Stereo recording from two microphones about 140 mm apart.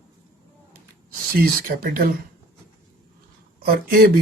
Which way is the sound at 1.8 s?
90° right.